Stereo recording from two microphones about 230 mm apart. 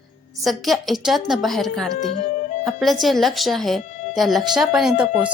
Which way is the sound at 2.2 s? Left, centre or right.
Left.